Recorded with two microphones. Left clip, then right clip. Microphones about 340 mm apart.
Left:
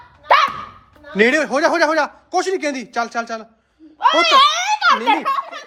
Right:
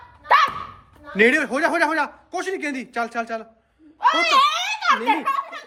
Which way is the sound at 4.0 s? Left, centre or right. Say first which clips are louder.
Left 4 dB; centre.